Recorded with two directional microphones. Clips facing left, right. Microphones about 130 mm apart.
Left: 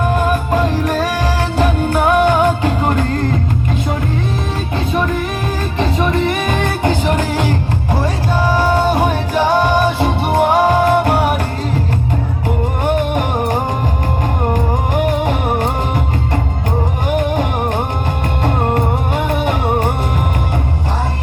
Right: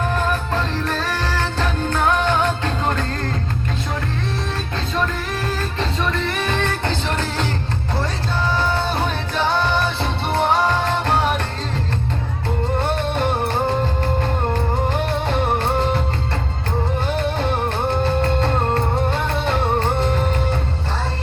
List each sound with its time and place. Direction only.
0.0 s music: 15° left (ahead or behind)
5.8 s music: 15° left (ahead or behind)
12.5 s music: 15° left (ahead or behind)
17.1 s music: 15° left (ahead or behind)